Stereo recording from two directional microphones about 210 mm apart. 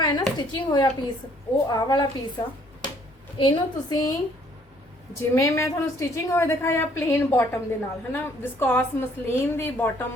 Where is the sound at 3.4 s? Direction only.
20° left (ahead or behind).